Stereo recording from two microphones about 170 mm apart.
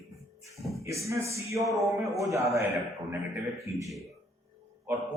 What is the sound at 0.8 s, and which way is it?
Speech, 20° right (ahead or behind).